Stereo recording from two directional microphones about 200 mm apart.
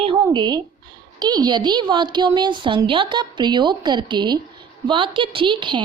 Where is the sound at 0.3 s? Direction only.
20° right (ahead or behind).